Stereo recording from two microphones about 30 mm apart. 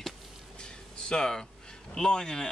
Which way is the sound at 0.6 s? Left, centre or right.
Left.